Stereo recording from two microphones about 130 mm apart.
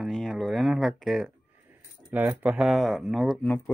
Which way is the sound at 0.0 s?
Centre (ahead or behind).